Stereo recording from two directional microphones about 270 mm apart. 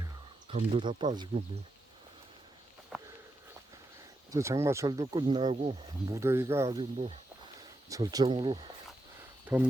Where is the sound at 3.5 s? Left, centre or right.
Centre.